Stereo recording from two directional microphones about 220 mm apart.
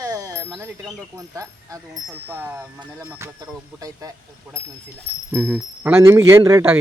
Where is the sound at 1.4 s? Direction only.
15° right (ahead or behind).